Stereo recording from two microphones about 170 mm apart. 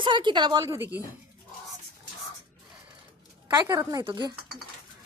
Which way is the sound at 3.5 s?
25° right (ahead or behind).